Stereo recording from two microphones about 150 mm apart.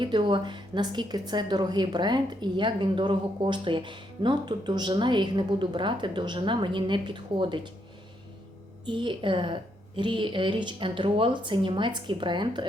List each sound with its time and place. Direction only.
0.0 s a woman's voice: 30° right (ahead or behind)
8.9 s a woman's voice: 35° right (ahead or behind)